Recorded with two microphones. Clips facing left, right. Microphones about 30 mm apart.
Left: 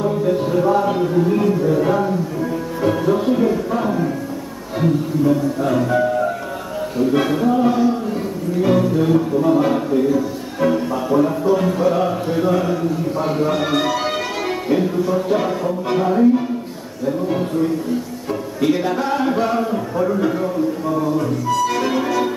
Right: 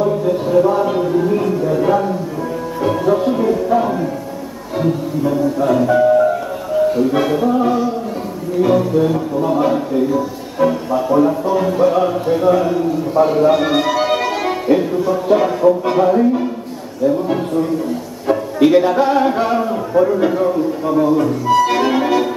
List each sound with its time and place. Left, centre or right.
0.0 s a sound: centre
2.8 s music: centre
13.1 s speech: centre
18.3 s speech: centre
20.8 s speech: right
21.5 s music: right